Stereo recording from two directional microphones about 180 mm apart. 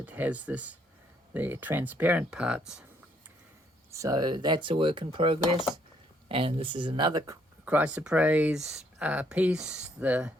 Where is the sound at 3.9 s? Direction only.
20° right (ahead or behind).